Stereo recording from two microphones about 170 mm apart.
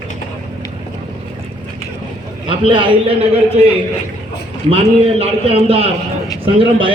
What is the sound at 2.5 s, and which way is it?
A man's voice, 30° right (ahead or behind).